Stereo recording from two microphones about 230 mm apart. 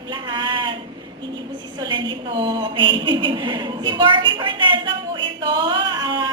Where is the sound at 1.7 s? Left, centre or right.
Centre.